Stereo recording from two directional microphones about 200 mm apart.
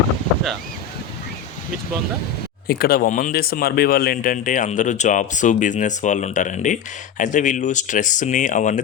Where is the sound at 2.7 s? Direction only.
50° left (ahead or behind).